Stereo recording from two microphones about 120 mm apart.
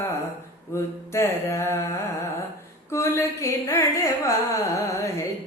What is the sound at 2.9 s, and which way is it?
Carnatic music, 25° left (ahead or behind).